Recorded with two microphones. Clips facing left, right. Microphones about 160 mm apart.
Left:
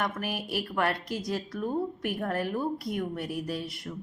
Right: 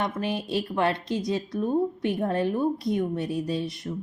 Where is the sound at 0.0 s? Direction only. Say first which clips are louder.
Right 4 dB; 25° right (ahead or behind).